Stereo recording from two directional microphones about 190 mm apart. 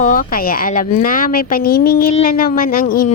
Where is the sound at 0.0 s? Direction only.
45° left (ahead or behind).